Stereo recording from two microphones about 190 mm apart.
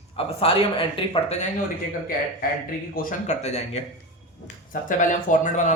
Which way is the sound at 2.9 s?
35° left (ahead or behind).